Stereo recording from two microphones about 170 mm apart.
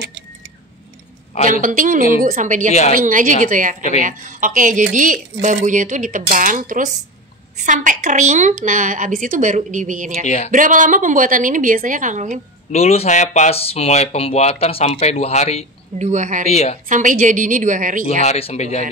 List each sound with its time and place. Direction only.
1.5 s a woman's voice: 50° right (ahead or behind)
10.2 s speech: 45° left (ahead or behind)
10.5 s a woman's voice: 50° right (ahead or behind)
12.7 s speech: 40° left (ahead or behind)
16.0 s a woman's voice: 45° right (ahead or behind)
16.4 s speech: 40° left (ahead or behind)
16.9 s a woman's voice: 50° right (ahead or behind)
18.2 s speech: 40° left (ahead or behind)